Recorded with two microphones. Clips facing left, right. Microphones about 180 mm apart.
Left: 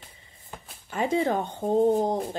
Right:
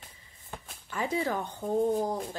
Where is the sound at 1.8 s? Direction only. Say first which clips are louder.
Left 6 dB; 50° left (ahead or behind).